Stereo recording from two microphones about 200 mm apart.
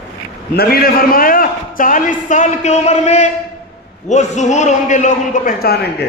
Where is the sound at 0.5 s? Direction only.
50° left (ahead or behind).